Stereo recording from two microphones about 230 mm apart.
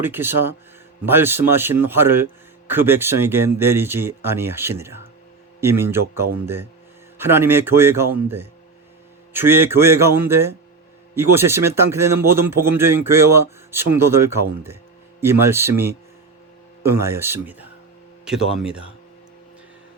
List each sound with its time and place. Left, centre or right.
0.0 s a man's voice: centre
17.0 s a man's voice: centre
18.3 s speech: left